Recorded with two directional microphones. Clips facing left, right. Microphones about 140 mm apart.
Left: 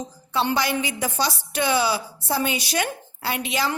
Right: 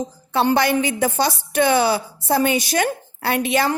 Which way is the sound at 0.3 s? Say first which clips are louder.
Right 6 dB; 55° right (ahead or behind).